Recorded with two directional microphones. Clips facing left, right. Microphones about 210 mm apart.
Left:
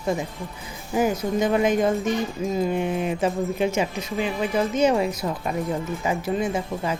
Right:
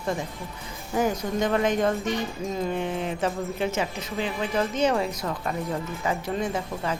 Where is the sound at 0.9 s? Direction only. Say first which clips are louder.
Left 3 dB; 10° left (ahead or behind).